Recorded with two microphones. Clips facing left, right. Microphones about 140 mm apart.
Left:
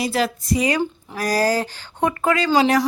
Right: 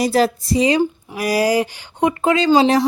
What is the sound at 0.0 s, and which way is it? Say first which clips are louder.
Speech: right 6 dB; 40° right (ahead or behind).